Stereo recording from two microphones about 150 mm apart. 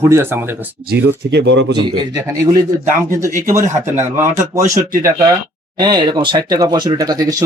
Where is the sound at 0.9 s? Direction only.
90° right.